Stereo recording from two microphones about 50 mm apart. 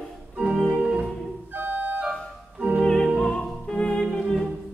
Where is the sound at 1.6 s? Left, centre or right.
Right.